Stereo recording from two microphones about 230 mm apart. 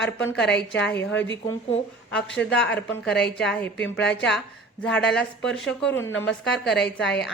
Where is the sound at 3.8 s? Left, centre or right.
Left.